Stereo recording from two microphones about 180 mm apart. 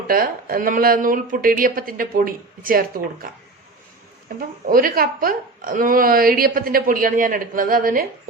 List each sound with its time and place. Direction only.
0.1 s a woman's voice: 55° right (ahead or behind)
4.4 s a woman's voice: 55° right (ahead or behind)